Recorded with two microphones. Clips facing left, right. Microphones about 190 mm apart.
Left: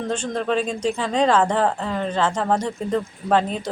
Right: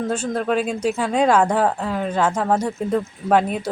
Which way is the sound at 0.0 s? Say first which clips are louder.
Right 2 dB; 5° right (ahead or behind).